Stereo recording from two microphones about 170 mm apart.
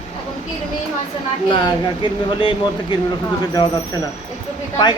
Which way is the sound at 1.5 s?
25° left (ahead or behind).